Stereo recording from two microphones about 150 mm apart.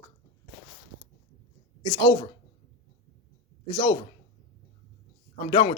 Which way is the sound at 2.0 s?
20° left (ahead or behind).